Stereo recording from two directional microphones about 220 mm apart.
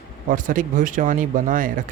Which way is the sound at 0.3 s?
35° right (ahead or behind).